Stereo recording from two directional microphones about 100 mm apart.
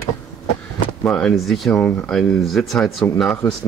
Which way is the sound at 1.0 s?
5° left (ahead or behind).